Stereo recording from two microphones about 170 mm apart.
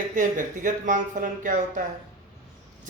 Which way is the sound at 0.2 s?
50° right (ahead or behind).